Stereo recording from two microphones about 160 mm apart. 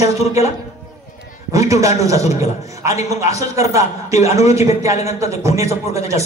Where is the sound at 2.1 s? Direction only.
45° left (ahead or behind).